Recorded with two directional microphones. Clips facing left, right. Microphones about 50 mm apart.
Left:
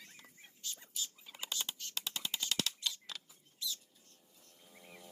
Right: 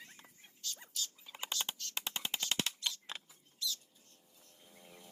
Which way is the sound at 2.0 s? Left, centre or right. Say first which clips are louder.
Right 1 dB; right.